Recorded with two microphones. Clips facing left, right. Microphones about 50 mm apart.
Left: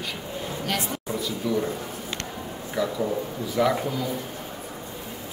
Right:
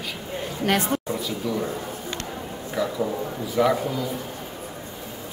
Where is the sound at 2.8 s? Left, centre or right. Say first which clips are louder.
Even; centre.